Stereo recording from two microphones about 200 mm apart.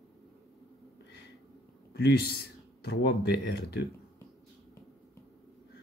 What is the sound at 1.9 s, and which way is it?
Speech, 55° left (ahead or behind).